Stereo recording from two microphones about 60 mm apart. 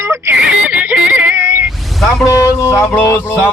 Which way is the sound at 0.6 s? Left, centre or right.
Right.